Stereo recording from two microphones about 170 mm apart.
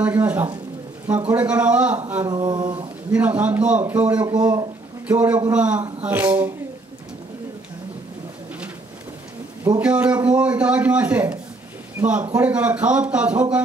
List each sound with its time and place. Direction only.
0.0 s a man's voice: 10° right (ahead or behind)
2.2 s a sound: 25° right (ahead or behind)
3.1 s a man's voice: 10° right (ahead or behind)
4.3 s a sound: 25° right (ahead or behind)
5.1 s a man's voice: 10° right (ahead or behind)
9.8 s a man's voice: 10° right (ahead or behind)